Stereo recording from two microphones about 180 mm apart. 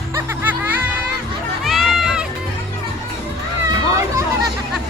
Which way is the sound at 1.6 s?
Centre (ahead or behind).